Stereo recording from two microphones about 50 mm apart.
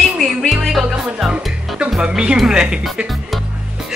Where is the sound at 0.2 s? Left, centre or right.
Centre.